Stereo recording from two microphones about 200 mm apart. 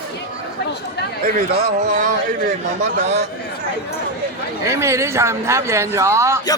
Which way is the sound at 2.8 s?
35° right (ahead or behind).